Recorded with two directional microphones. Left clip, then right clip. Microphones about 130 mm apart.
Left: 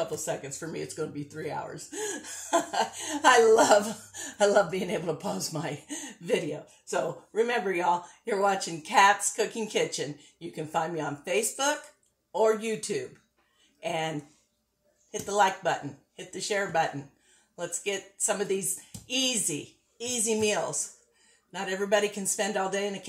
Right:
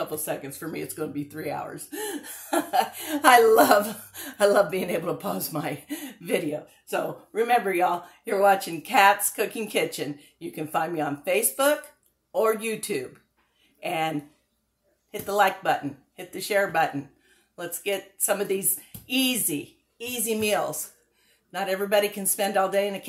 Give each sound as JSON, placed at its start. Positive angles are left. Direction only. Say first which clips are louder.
{"t": 0.0, "sound": "speech", "louder": "right 1 dB", "side_deg": -15}